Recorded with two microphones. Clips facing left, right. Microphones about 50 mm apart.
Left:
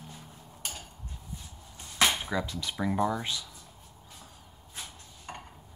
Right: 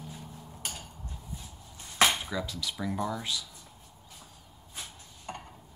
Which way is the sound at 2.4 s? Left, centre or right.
Left.